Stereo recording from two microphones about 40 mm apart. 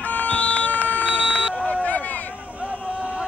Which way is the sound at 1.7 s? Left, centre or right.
Left.